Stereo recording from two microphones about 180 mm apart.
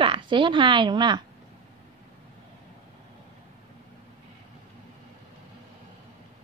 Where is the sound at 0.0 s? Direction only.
25° right (ahead or behind).